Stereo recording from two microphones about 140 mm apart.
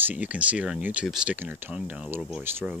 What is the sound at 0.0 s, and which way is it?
Speech, 10° right (ahead or behind).